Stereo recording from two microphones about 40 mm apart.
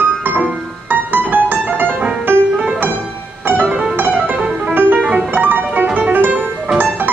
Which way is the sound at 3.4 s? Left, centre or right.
Right.